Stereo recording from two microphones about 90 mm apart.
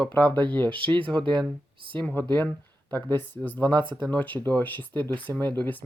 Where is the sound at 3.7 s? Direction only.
60° right (ahead or behind).